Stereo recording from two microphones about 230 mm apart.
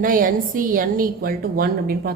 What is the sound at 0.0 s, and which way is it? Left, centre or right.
A woman's voice, right.